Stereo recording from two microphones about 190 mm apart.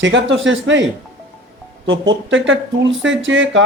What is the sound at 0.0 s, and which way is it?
Speech, 75° right (ahead or behind).